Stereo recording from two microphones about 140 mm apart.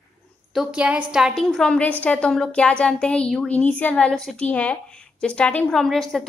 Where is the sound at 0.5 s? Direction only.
10° right (ahead or behind).